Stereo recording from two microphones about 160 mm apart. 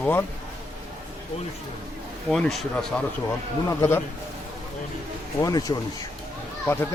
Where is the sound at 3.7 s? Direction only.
15° left (ahead or behind).